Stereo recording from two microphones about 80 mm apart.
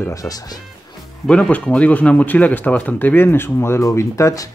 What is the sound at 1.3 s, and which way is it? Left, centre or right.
Speech, centre.